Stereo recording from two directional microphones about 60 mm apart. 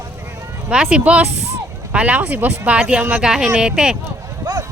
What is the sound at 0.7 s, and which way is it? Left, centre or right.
Speech, centre.